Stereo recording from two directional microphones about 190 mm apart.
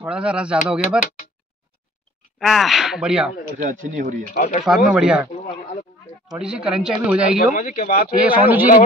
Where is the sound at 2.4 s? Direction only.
Centre (ahead or behind).